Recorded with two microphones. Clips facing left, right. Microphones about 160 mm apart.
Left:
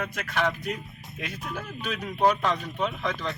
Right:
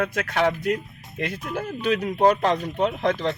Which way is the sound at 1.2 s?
75° right (ahead or behind).